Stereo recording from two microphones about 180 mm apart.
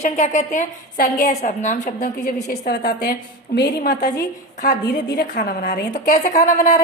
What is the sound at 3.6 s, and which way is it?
A woman's voice, 60° left (ahead or behind).